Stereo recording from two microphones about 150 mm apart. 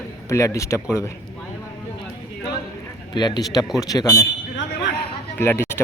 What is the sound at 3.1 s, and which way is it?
A man's voice, 30° left (ahead or behind).